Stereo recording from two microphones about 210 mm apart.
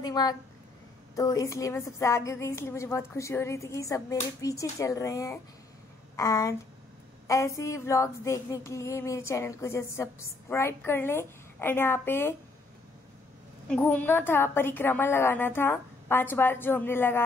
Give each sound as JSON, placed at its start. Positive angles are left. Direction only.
{"t": 0.0, "sound": "a sound", "side_deg": 20}
{"t": 1.1, "sound": "a woman's voice", "side_deg": 15}
{"t": 13.7, "sound": "a woman's voice", "side_deg": 5}